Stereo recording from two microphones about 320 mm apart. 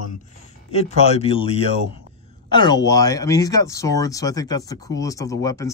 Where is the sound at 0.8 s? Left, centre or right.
Centre.